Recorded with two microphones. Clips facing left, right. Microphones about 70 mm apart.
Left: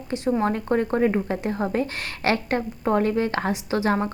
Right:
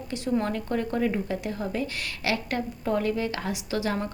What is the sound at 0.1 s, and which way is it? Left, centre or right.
Speech, left.